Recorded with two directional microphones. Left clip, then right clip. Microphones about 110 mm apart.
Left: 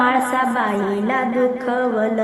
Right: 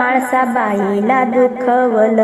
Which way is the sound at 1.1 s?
40° right (ahead or behind).